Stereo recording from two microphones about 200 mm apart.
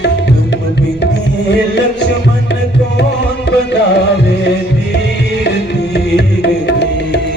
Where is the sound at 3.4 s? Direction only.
55° left (ahead or behind).